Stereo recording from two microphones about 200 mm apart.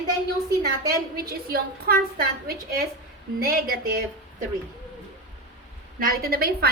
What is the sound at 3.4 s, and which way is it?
Speech, 50° right (ahead or behind).